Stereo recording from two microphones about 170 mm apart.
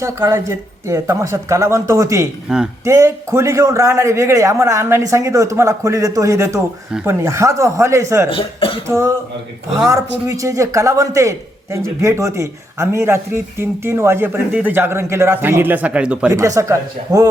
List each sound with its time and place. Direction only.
0.0 s speech: 15° right (ahead or behind)
2.5 s speech: 5° right (ahead or behind)
2.8 s speech: 15° right (ahead or behind)
8.3 s speech: 30° left (ahead or behind)
8.9 s speech: 15° right (ahead or behind)
16.3 s speech: 20° right (ahead or behind)